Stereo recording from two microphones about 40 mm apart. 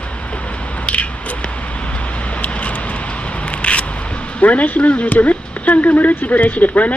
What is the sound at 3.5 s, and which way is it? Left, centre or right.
Single-lens reflex camera, left.